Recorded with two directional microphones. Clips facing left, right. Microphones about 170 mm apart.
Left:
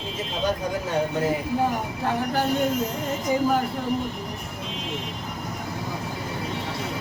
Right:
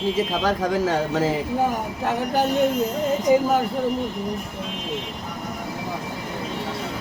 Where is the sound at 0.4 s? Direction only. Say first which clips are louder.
Right 2 dB; 90° right.